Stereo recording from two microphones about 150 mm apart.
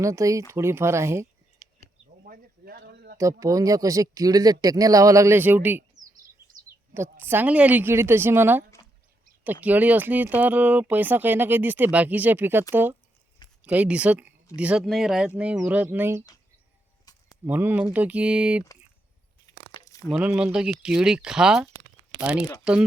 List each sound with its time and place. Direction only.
0.0 s speech: 20° right (ahead or behind)
2.2 s a sound: 80° right
3.4 s speech: 25° right (ahead or behind)
6.9 s speech: 15° right (ahead or behind)
17.1 s a sound: 25° left (ahead or behind)
17.4 s speech: 15° right (ahead or behind)
19.7 s crumpling: 25° left (ahead or behind)
20.1 s speech: 5° right (ahead or behind)